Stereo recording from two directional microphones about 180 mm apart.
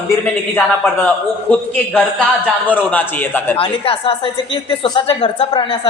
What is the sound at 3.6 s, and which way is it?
A man's voice, 30° left (ahead or behind).